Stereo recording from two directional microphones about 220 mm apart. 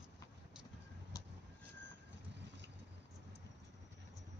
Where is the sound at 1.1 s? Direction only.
15° left (ahead or behind).